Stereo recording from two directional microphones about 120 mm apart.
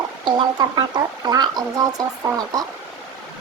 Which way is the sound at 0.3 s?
40° right (ahead or behind).